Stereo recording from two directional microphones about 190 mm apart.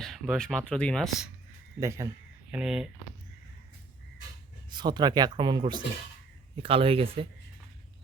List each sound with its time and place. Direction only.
0.0 s speech: centre (ahead or behind)
1.8 s speech: 15° right (ahead or behind)
2.5 s speech: 5° right (ahead or behind)
4.7 s speech: 25° right (ahead or behind)